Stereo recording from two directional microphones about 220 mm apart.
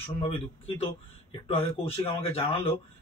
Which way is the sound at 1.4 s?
25° left (ahead or behind).